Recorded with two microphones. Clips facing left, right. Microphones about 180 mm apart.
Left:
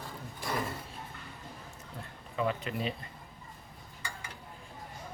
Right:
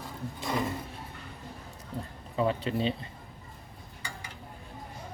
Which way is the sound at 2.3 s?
30° right (ahead or behind).